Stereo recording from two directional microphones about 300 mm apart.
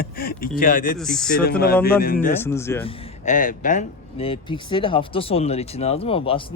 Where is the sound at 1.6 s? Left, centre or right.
Left.